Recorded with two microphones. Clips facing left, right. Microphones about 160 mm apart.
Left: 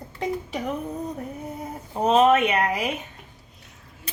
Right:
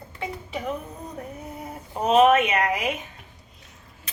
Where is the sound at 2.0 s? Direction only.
35° left (ahead or behind).